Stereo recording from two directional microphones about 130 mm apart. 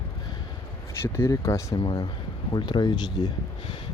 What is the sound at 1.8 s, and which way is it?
Speech, 40° left (ahead or behind).